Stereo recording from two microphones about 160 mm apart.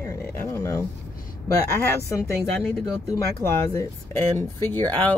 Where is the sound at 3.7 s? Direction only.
20° left (ahead or behind).